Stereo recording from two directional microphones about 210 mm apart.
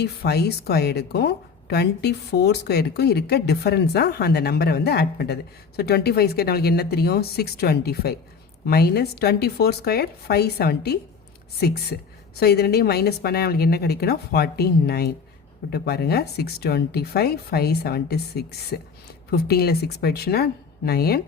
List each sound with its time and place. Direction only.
0.0 s a woman's voice: 50° left (ahead or behind)